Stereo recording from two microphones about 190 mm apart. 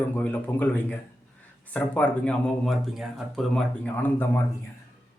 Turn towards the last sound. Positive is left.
turn(degrees=10)  # may be behind; listen again after turning